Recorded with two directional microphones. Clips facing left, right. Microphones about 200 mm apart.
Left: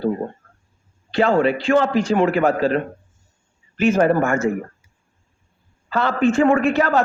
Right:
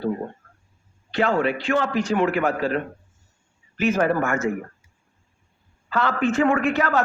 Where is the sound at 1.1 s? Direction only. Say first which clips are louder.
Left 4 dB; 30° left (ahead or behind).